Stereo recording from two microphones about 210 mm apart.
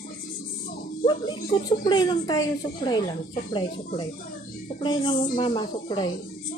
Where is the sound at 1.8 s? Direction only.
20° left (ahead or behind).